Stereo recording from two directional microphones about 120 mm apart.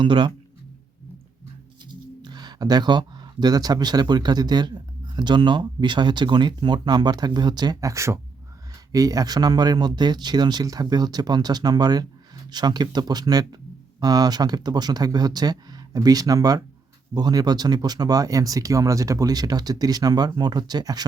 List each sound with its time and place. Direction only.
0.0 s speech: 40° right (ahead or behind)
1.9 s speech: 35° right (ahead or behind)